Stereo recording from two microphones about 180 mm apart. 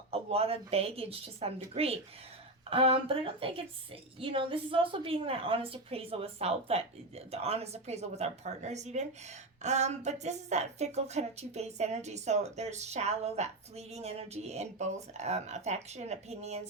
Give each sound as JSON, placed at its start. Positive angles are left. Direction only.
{"t": 0.1, "sound": "speech", "side_deg": -35}